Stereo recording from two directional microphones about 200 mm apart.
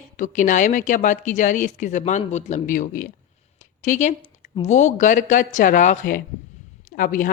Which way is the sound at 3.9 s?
35° left (ahead or behind).